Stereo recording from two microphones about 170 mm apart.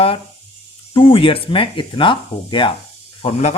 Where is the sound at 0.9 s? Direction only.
30° left (ahead or behind).